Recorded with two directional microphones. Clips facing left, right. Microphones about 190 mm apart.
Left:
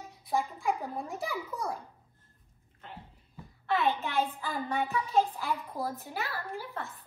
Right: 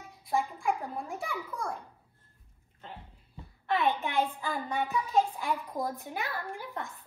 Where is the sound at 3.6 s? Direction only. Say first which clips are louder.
Even; 15° right (ahead or behind).